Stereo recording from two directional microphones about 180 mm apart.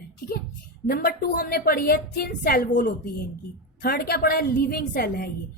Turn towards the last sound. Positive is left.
turn(degrees=55)  # may be behind; listen again after turning